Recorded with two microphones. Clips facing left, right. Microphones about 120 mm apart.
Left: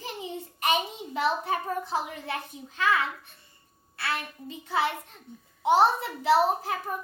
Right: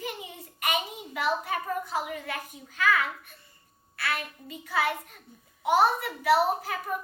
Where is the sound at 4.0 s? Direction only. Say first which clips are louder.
Even; 25° left (ahead or behind).